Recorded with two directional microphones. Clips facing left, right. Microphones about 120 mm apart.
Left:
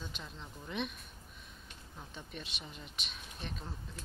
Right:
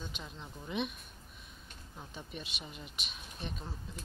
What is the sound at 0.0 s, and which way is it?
Speech, 5° right (ahead or behind).